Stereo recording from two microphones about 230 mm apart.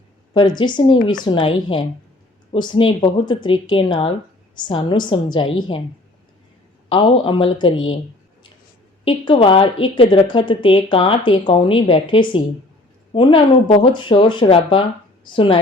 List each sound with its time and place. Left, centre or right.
0.3 s a woman's voice: centre
6.8 s a woman's voice: left
9.0 s a woman's voice: left